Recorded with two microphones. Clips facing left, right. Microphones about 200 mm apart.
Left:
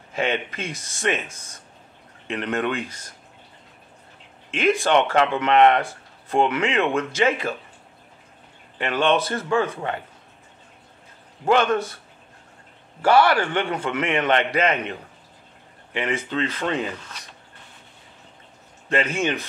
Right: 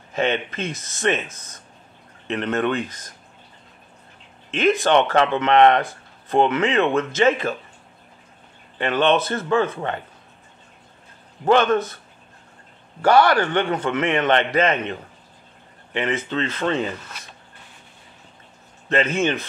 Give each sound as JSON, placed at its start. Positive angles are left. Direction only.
{"t": 0.1, "sound": "speech", "side_deg": 10}
{"t": 4.5, "sound": "speech", "side_deg": 10}
{"t": 8.7, "sound": "speech", "side_deg": 5}
{"t": 11.4, "sound": "speech", "side_deg": 10}
{"t": 13.0, "sound": "speech", "side_deg": 5}
{"t": 15.9, "sound": "speech", "side_deg": 10}
{"t": 18.9, "sound": "speech", "side_deg": 10}